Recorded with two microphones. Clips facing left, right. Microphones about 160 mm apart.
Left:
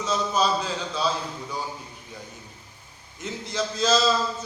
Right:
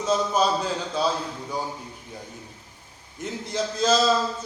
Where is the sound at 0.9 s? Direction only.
50° right (ahead or behind).